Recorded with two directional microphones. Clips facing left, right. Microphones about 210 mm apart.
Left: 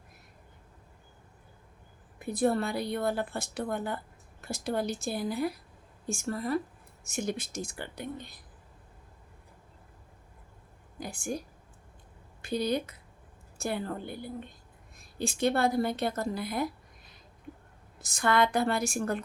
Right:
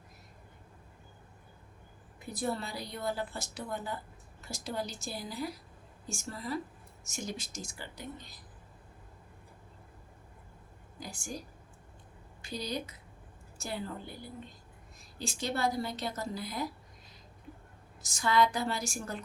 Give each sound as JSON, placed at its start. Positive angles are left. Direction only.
{"t": 2.1, "sound": "speech", "side_deg": 55}
{"t": 11.0, "sound": "speech", "side_deg": 60}
{"t": 12.4, "sound": "speech", "side_deg": 55}
{"t": 15.2, "sound": "speech", "side_deg": 55}
{"t": 18.0, "sound": "speech", "side_deg": 60}